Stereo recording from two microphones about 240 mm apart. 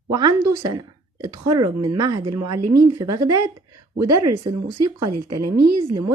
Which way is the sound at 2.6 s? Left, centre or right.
Right.